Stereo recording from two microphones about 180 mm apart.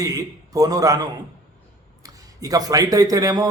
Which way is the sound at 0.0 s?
20° right (ahead or behind).